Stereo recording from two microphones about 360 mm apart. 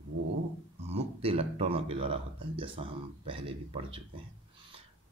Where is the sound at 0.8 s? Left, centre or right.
Centre.